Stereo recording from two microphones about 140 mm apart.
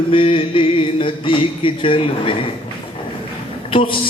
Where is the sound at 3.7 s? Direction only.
40° left (ahead or behind).